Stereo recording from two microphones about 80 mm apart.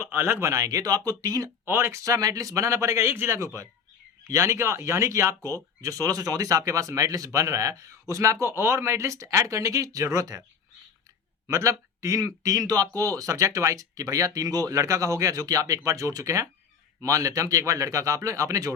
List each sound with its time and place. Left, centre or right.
0.0 s speech: right
1.6 s speech: right
2.0 s speech: right
11.4 s speech: right